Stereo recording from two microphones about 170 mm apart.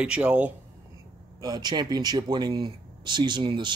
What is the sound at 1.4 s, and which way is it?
Speech, 25° right (ahead or behind).